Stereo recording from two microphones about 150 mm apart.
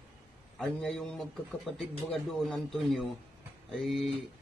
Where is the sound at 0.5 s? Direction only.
5° left (ahead or behind).